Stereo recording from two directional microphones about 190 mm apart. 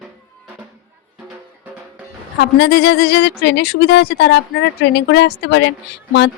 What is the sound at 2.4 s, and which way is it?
Speech, 60° left (ahead or behind).